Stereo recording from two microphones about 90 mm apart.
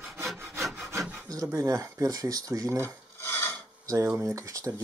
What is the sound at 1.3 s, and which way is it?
Speech, 40° right (ahead or behind).